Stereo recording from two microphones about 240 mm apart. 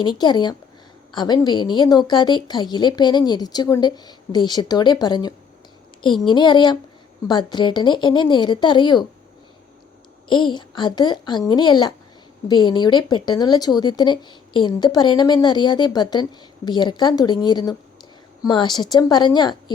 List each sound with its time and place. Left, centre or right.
0.0 s speech: centre
10.2 s speech: centre